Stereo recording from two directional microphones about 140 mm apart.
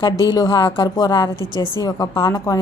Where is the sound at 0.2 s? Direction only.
25° left (ahead or behind).